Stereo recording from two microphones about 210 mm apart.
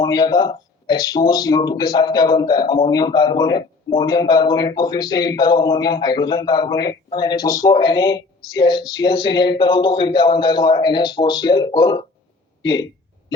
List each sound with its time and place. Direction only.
0.0 s speech: 20° left (ahead or behind)